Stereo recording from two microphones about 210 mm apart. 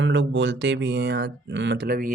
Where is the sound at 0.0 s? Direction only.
60° right (ahead or behind).